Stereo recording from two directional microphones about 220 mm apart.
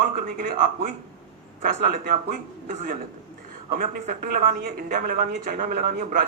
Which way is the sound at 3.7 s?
40° right (ahead or behind).